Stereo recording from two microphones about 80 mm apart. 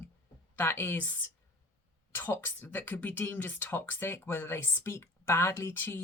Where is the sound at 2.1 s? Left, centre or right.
Left.